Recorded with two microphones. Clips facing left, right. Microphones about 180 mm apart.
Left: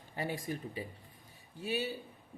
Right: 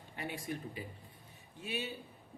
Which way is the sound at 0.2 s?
35° left (ahead or behind).